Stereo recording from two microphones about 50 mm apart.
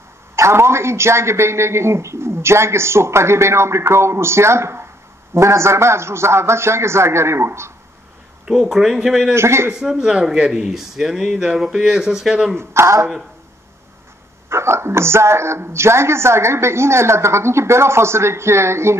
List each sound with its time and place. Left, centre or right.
0.4 s a man's voice: right
8.5 s speech: centre
9.3 s a man's voice: right
9.7 s speech: centre
12.5 s a man's voice: right
14.5 s a man's voice: right